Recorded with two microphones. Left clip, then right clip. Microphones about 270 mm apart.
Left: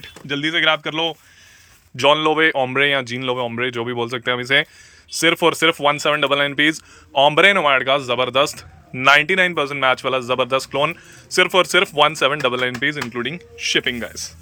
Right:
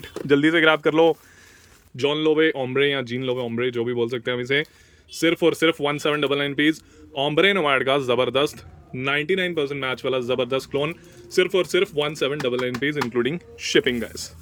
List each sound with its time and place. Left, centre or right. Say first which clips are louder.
0.3 s speech: right 1 dB; centre
2.0 s speech: left 5 dB; centre